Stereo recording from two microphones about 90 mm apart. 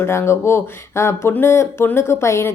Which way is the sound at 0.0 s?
30° left (ahead or behind).